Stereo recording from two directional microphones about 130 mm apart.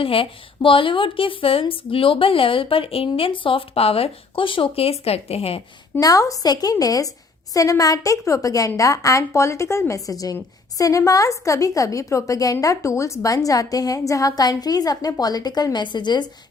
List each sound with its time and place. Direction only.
0.0 s a woman's voice: 45° left (ahead or behind)
6.0 s a woman's voice: 25° left (ahead or behind)